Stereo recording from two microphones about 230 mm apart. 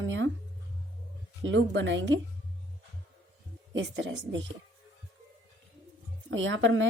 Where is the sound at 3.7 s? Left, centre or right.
Right.